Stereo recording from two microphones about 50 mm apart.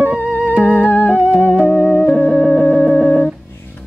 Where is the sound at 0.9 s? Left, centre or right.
Left.